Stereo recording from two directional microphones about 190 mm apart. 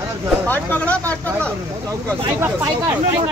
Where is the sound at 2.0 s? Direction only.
15° right (ahead or behind).